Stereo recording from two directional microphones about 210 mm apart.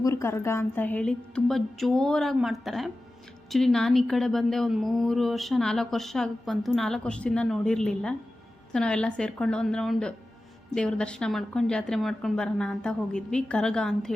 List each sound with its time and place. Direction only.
0.0 s speech: 15° left (ahead or behind)